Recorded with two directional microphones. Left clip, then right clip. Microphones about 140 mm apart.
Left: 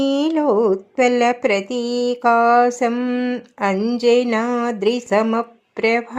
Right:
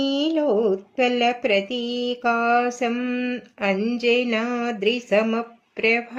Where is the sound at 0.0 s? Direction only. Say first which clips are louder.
Left 4 dB; 45° left (ahead or behind).